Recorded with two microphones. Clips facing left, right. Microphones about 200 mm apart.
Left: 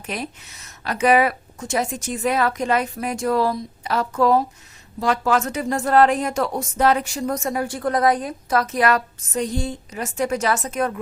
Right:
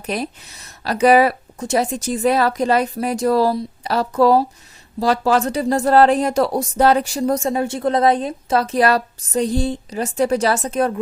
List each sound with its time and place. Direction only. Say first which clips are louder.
0.0 s speech: right 5 dB; 35° right (ahead or behind)